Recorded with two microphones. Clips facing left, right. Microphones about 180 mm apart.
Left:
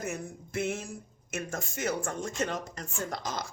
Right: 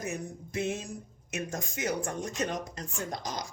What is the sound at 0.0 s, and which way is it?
Speech, 15° right (ahead or behind).